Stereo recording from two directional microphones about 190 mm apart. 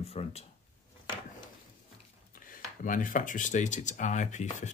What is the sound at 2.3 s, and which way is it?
Speech, 45° left (ahead or behind).